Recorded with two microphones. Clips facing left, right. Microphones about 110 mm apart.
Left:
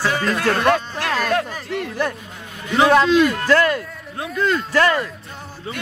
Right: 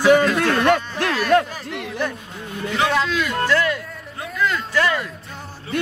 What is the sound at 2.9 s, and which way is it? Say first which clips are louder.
Speech: left 7 dB; 45° left (ahead or behind).